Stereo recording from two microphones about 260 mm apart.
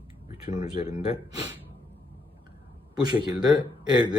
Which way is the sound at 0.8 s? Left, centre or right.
Left.